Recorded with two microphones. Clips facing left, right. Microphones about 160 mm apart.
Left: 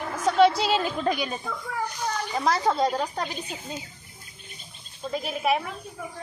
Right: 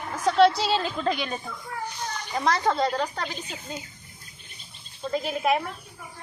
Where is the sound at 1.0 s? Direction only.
10° left (ahead or behind).